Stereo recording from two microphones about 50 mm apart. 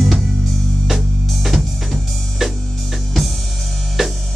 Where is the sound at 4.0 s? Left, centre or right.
Centre.